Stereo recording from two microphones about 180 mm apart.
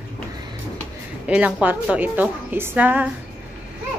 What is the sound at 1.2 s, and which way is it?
A woman's voice, 5° right (ahead or behind).